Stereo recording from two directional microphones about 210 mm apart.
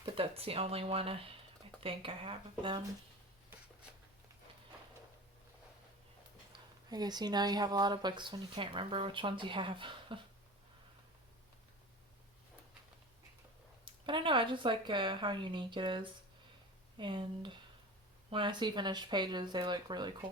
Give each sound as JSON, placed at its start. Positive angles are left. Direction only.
{"t": 0.0, "sound": "speech", "side_deg": -25}
{"t": 6.5, "sound": "speech", "side_deg": -20}
{"t": 13.8, "sound": "speech", "side_deg": -25}